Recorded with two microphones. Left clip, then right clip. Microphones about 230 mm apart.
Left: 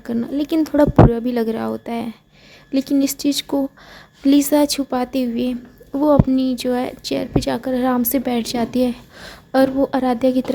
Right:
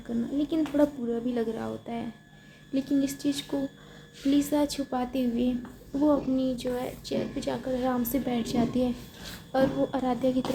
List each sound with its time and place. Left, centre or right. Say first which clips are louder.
0.0 s a woman's voice: left 8 dB; left